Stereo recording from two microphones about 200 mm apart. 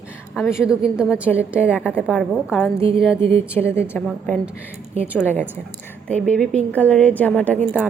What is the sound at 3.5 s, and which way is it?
Speech, 10° left (ahead or behind).